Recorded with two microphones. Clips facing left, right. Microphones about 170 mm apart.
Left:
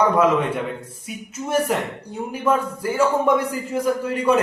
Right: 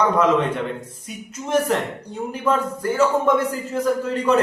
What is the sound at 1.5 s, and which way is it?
Speech, 10° left (ahead or behind).